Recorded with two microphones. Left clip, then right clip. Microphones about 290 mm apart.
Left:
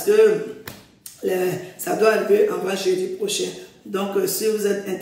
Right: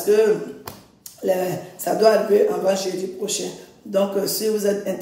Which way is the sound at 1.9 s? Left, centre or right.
Centre.